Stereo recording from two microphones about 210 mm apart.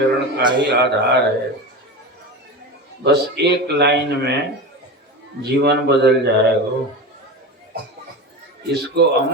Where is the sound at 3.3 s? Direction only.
50° right (ahead or behind).